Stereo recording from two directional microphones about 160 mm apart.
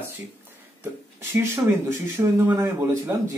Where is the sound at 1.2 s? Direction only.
15° right (ahead or behind).